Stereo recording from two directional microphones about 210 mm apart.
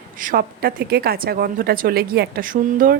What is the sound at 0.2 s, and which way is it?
Speech, 45° right (ahead or behind).